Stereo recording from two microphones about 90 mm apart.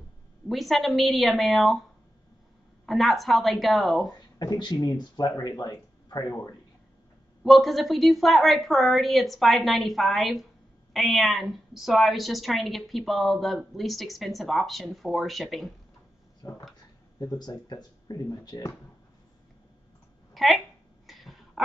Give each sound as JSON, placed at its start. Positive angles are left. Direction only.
{"t": 0.5, "sound": "a woman's voice", "side_deg": 0}
{"t": 2.9, "sound": "a woman's voice", "side_deg": 0}
{"t": 4.4, "sound": "speech", "side_deg": 50}
{"t": 7.4, "sound": "a woman's voice", "side_deg": 0}
{"t": 16.4, "sound": "speech", "side_deg": 45}
{"t": 20.3, "sound": "a woman's voice", "side_deg": 0}
{"t": 21.1, "sound": "a sound", "side_deg": 0}